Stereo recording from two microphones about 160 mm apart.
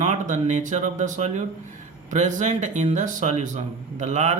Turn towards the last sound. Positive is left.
turn(degrees=-45)  # may be behind; listen again after turning